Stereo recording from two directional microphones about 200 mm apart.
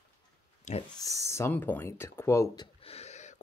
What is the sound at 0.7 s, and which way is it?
Speech, 35° left (ahead or behind).